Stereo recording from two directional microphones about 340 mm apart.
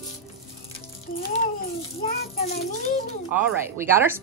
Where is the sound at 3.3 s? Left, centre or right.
Centre.